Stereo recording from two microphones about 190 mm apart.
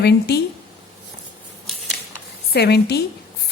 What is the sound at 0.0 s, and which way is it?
Speech, 60° left (ahead or behind).